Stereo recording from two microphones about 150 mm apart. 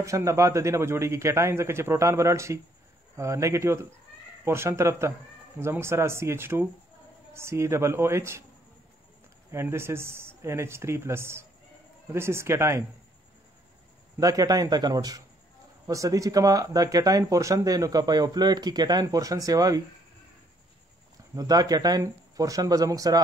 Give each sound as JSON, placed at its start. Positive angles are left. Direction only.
{"t": 0.0, "sound": "speech", "side_deg": -20}
{"t": 9.5, "sound": "speech", "side_deg": -15}
{"t": 14.1, "sound": "speech", "side_deg": -25}
{"t": 21.4, "sound": "speech", "side_deg": -25}